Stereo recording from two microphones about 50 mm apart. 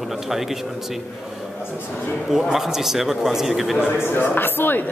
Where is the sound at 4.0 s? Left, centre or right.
Left.